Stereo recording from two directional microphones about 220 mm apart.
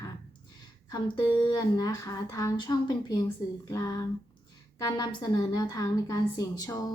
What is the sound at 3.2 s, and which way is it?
A woman's voice, 15° left (ahead or behind).